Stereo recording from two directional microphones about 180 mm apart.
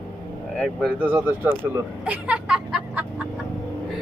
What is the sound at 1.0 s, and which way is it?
Speech, 10° right (ahead or behind).